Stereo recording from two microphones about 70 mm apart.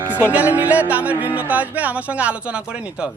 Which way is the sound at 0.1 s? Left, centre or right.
Right.